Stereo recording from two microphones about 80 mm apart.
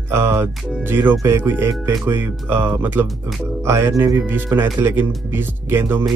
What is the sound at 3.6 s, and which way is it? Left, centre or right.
Speech, right.